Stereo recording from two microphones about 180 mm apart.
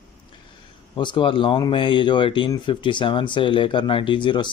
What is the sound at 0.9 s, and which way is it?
Mantra, 25° left (ahead or behind).